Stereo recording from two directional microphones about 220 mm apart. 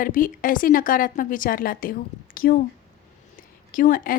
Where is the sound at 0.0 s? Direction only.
40° left (ahead or behind).